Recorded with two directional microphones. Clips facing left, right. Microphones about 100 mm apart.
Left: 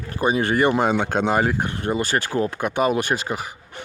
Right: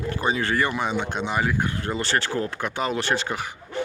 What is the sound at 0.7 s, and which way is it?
Speech, 40° left (ahead or behind).